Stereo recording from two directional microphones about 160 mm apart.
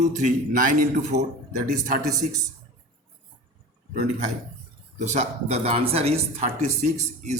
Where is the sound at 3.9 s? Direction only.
55° right (ahead or behind).